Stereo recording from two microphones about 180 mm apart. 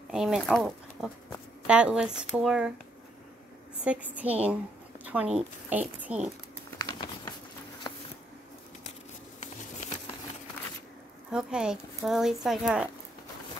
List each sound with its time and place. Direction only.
0.1 s speech: centre (ahead or behind)
3.8 s a woman's voice: 5° right (ahead or behind)
6.8 s patter: 20° left (ahead or behind)
9.4 s patter: 40° left (ahead or behind)
11.3 s speech: 5° right (ahead or behind)